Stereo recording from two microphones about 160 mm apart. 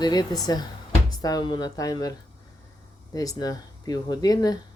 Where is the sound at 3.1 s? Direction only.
20° left (ahead or behind).